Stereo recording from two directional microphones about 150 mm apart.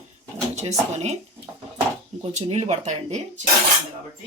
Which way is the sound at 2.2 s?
45° right (ahead or behind).